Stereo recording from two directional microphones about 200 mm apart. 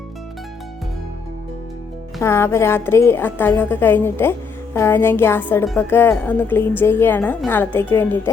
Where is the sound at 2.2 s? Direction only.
15° left (ahead or behind).